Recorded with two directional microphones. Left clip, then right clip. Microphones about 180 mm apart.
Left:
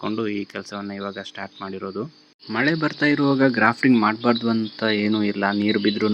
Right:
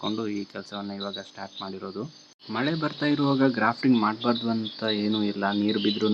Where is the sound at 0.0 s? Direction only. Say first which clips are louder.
Left 4 dB; 15° left (ahead or behind).